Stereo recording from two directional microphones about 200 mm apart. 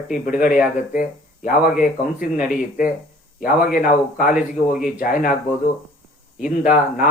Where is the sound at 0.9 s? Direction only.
40° left (ahead or behind).